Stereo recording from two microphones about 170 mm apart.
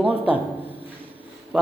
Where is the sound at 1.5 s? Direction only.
5° right (ahead or behind).